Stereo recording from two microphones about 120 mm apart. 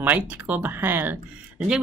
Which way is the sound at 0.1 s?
15° right (ahead or behind).